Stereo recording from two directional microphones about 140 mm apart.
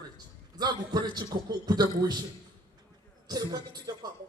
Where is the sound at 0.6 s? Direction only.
30° right (ahead or behind).